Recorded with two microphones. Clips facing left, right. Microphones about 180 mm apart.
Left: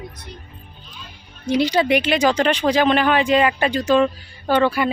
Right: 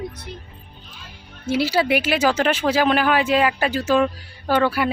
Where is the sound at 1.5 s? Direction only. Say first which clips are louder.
Left 2 dB; 5° right (ahead or behind).